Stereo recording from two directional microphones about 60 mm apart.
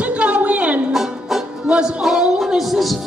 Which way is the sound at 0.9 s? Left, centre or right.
Centre.